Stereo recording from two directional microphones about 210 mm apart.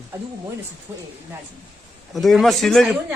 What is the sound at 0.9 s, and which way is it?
Speech, 10° right (ahead or behind).